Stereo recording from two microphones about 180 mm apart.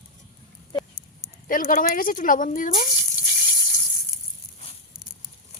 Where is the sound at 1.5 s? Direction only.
50° left (ahead or behind).